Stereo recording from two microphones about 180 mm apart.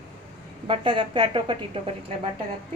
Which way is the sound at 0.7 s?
25° right (ahead or behind).